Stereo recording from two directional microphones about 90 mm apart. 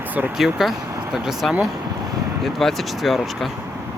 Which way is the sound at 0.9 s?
35° right (ahead or behind).